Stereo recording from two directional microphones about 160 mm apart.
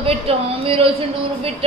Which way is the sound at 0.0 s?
35° right (ahead or behind).